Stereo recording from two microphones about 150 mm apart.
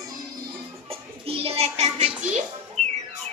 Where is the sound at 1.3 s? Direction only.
40° right (ahead or behind).